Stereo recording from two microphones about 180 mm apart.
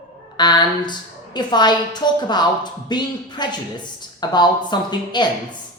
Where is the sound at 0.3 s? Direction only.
25° left (ahead or behind).